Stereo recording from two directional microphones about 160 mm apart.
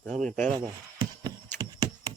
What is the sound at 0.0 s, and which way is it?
Speech, 5° left (ahead or behind).